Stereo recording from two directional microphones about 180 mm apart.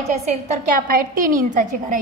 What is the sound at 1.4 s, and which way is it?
Speech, 45° right (ahead or behind).